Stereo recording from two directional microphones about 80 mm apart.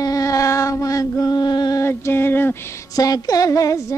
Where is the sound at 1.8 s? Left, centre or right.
Left.